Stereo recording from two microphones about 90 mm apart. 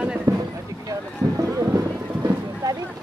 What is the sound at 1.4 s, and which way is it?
Music, 35° right (ahead or behind).